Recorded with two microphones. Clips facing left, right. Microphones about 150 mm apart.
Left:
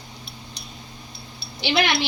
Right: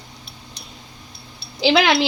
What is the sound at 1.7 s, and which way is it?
Speech, 80° right.